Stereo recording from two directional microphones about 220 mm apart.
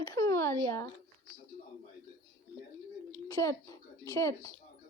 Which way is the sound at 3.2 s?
15° left (ahead or behind).